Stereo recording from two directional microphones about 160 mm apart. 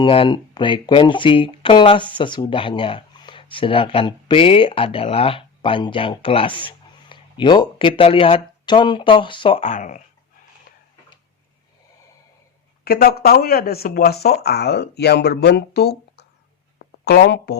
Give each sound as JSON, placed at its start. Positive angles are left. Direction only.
{"t": 0.0, "sound": "speech", "side_deg": 30}
{"t": 9.6, "sound": "speech", "side_deg": 50}
{"t": 12.8, "sound": "speech", "side_deg": 75}
{"t": 16.7, "sound": "a sound", "side_deg": 90}